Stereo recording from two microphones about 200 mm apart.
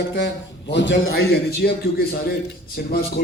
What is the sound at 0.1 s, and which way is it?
A man's voice, 60° left (ahead or behind).